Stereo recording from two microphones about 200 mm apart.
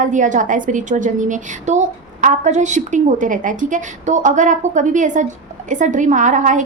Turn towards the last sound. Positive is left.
turn(degrees=-40)  # may be behind; listen again after turning